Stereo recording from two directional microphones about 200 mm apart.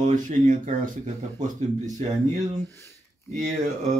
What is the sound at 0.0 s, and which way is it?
Speech, 40° right (ahead or behind).